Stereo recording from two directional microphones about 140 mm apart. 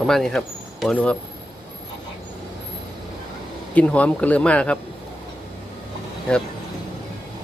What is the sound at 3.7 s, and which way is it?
Speech, 10° left (ahead or behind).